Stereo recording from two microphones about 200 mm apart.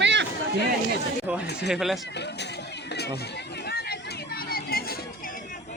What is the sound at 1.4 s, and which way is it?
Speech, 55° left (ahead or behind).